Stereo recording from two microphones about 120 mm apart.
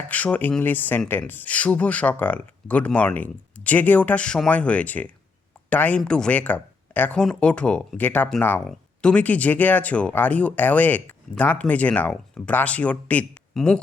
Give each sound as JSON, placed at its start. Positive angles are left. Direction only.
{"t": 0.1, "sound": "speech", "side_deg": 15}